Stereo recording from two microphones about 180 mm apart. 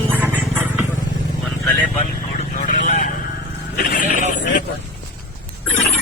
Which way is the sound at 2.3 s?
40° left (ahead or behind).